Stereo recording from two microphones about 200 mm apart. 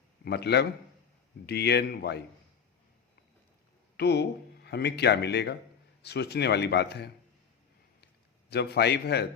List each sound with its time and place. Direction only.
0.3 s speech: 55° left (ahead or behind)
3.9 s speech: 55° left (ahead or behind)
8.0 s a sound: 55° left (ahead or behind)